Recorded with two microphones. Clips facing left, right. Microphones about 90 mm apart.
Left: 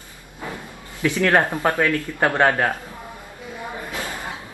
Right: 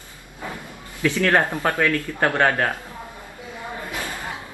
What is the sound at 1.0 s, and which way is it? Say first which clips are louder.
Speech: left 1 dB; 15° left (ahead or behind).